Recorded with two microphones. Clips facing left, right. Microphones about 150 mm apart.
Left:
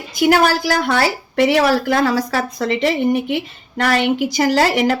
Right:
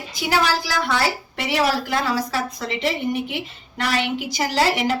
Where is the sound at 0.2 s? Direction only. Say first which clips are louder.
Left 7 dB; 55° left (ahead or behind).